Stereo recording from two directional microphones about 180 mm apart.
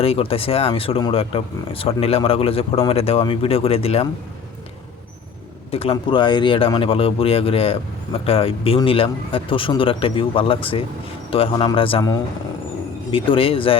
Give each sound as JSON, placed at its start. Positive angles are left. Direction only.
{"t": 0.0, "sound": "speech", "side_deg": 30}
{"t": 5.7, "sound": "a man's voice", "side_deg": 30}